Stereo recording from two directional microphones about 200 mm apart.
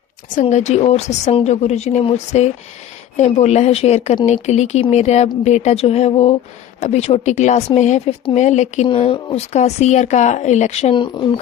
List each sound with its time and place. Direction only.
0.4 s speech: 35° left (ahead or behind)